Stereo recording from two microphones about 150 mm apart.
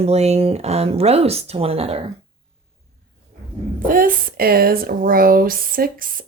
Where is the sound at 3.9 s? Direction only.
70° right (ahead or behind).